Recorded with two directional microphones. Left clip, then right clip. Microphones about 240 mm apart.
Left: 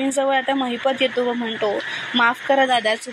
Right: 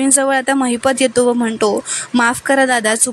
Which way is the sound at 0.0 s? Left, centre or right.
Right.